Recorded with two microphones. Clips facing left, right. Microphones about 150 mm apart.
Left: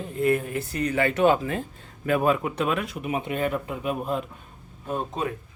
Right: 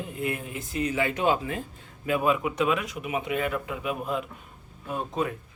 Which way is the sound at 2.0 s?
45° left (ahead or behind).